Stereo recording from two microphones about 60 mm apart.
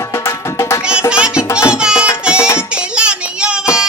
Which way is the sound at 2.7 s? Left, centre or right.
Centre.